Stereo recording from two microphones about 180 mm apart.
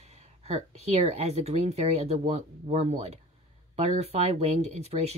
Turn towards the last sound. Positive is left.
turn(degrees=-35)  # may be behind; listen again after turning